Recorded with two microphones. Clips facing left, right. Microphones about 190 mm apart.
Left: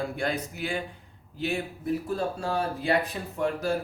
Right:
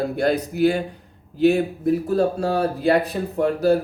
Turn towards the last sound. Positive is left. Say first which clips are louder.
# right 9 dB
turn(degrees=-35)  # may be behind; listen again after turning